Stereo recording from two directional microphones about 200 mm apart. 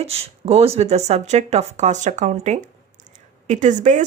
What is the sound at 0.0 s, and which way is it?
A woman's voice, 30° right (ahead or behind).